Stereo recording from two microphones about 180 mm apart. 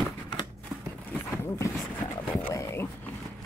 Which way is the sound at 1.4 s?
15° left (ahead or behind).